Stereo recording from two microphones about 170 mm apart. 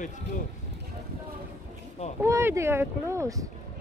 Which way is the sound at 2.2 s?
15° right (ahead or behind).